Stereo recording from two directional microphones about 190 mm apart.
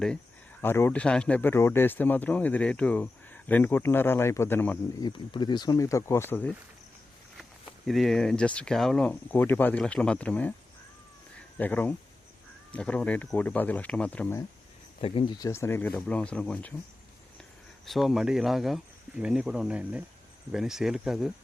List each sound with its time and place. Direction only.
0.6 s speech: 10° left (ahead or behind)
4.9 s speech: 25° left (ahead or behind)
7.9 s speech: centre (ahead or behind)
11.5 s speech: 10° left (ahead or behind)
15.0 s speech: 25° left (ahead or behind); by 16.7 s 5° left (ahead or behind)
17.8 s speech: centre (ahead or behind)